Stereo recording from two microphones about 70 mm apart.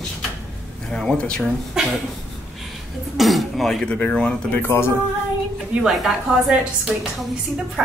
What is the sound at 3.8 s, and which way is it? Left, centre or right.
Speech, centre.